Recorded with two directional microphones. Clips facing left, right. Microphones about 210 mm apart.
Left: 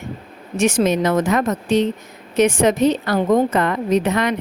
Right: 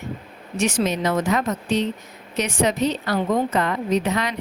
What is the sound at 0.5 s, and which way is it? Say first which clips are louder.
A woman's voice: left 5 dB; 50° left (ahead or behind).